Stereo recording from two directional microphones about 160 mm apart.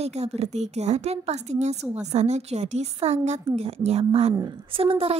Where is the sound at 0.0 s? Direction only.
45° right (ahead or behind).